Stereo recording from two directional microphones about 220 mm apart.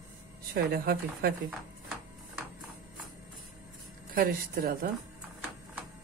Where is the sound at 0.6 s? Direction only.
45° right (ahead or behind).